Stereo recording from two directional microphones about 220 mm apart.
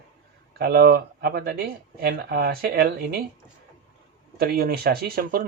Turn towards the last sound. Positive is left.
turn(degrees=-40)  # may be behind; listen again after turning